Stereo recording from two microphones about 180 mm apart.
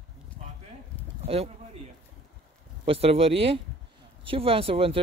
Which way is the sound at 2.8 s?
35° right (ahead or behind).